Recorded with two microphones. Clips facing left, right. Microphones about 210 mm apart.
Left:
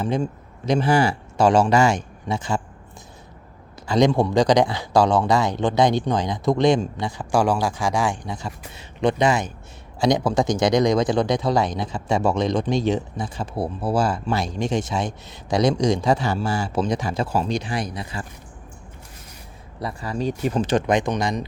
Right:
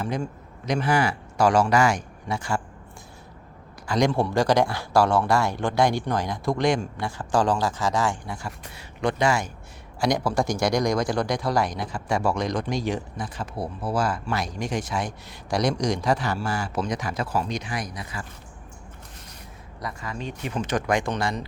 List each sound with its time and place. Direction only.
0.0 s a man's voice: 25° left (ahead or behind)
3.8 s speech: 25° left (ahead or behind)
19.8 s speech: 30° left (ahead or behind); by 21.4 s 15° left (ahead or behind)